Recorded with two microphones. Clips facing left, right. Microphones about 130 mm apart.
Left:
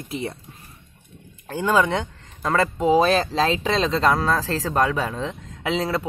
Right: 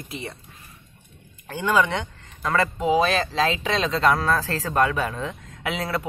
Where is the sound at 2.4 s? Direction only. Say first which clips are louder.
Left 2 dB; 25° left (ahead or behind).